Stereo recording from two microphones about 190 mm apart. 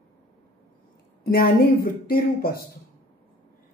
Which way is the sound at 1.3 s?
50° left (ahead or behind).